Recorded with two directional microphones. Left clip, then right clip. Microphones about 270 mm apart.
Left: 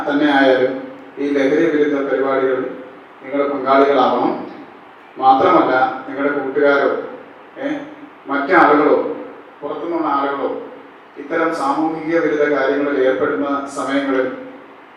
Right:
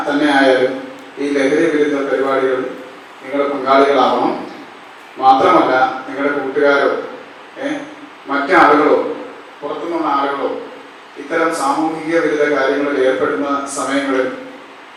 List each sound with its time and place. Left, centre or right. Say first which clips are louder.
0.1 s a man's voice: right 1 dB; centre
7.6 s a sound: right 1 dB; centre
8.3 s a man's voice: right 2 dB; centre
11.8 s a man's voice: right 1 dB; centre
12.0 s a man's voice: right 1 dB; centre